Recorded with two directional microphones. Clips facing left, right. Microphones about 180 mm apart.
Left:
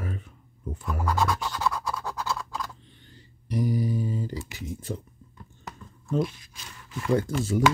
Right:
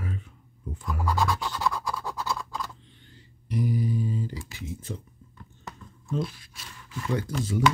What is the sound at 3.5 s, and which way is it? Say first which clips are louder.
Mantra: left 1 dB; 40° left (ahead or behind).